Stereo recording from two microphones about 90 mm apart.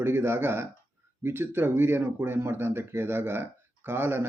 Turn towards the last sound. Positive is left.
turn(degrees=-25)  # may be behind; listen again after turning